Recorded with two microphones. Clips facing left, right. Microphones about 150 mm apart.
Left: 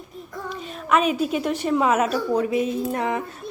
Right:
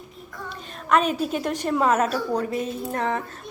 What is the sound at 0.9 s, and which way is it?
A woman's voice, 5° left (ahead or behind).